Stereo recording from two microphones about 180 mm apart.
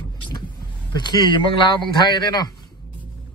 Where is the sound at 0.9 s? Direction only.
25° left (ahead or behind).